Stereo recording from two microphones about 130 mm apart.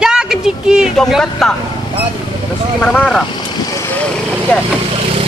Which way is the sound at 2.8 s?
10° left (ahead or behind).